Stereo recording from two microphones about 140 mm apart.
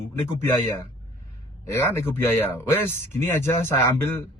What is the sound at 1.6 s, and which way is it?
A man's voice, 20° left (ahead or behind).